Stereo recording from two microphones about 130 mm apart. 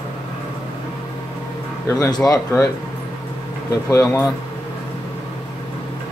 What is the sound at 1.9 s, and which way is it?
Speech, 25° left (ahead or behind).